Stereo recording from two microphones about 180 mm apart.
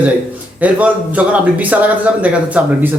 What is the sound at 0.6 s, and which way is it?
A man's voice, 10° right (ahead or behind).